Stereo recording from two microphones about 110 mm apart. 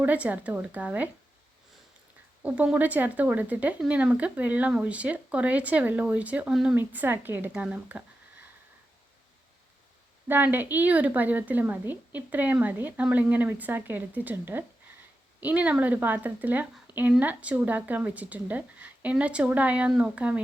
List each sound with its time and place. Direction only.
0.0 s a woman's voice: 15° right (ahead or behind)
2.7 s a woman's voice: 15° right (ahead or behind)
6.7 s a woman's voice: 15° right (ahead or behind)
10.2 s a woman's voice: 20° right (ahead or behind)